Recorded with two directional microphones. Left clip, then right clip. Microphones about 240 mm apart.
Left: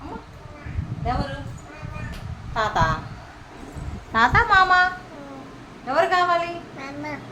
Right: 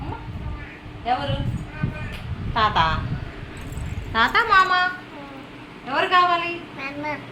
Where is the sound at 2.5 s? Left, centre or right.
Centre.